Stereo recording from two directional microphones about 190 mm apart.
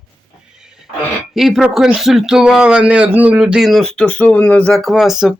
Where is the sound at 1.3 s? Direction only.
Centre (ahead or behind).